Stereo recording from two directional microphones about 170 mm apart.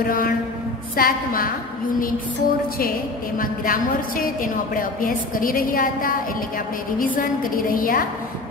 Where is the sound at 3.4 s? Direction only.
55° left (ahead or behind).